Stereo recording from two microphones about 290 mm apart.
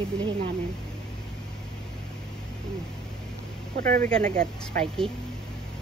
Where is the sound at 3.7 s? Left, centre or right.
Right.